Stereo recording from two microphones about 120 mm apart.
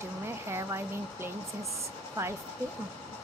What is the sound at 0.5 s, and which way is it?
Speech, 25° right (ahead or behind).